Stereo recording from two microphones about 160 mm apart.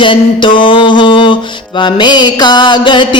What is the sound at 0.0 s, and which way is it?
Mantra, 30° left (ahead or behind).